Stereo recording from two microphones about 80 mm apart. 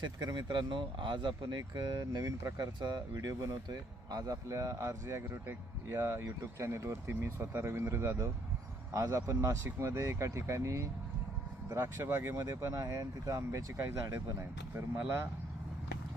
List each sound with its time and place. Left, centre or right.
0.0 s speech: right
2.2 s speech: right
2.8 s speech: right
14.8 s speech: right